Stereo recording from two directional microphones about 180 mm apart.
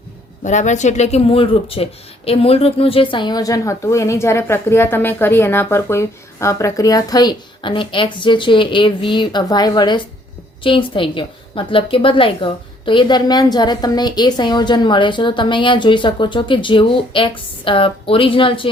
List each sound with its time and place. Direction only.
0.4 s speech: 40° left (ahead or behind)